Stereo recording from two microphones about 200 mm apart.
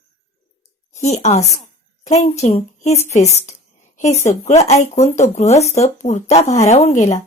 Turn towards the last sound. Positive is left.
turn(degrees=40)  # may be behind; listen again after turning